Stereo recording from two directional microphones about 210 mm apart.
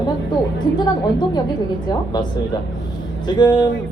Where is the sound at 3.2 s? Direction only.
20° left (ahead or behind).